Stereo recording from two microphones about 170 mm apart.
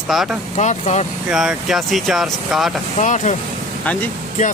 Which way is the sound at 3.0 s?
45° left (ahead or behind).